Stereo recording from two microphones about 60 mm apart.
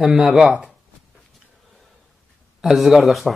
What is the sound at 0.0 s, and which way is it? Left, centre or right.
Speech, centre.